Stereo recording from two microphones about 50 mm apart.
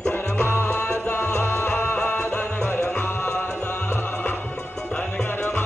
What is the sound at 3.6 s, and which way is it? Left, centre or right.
Music, left.